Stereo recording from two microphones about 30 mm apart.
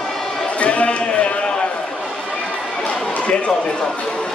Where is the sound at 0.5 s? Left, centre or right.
Left.